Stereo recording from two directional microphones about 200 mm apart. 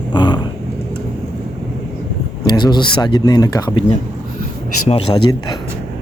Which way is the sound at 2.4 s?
20° left (ahead or behind).